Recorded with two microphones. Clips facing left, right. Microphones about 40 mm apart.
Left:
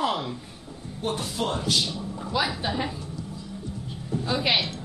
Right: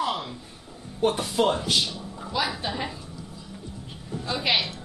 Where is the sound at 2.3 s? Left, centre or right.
Centre.